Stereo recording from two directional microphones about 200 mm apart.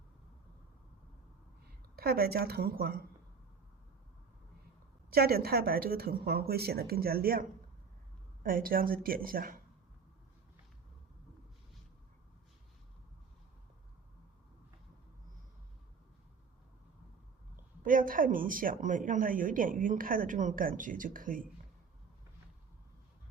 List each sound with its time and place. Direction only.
1.6 s a woman's voice: 50° right (ahead or behind)
5.1 s speech: 50° right (ahead or behind)
8.4 s speech: 45° right (ahead or behind)
17.8 s speech: 45° right (ahead or behind)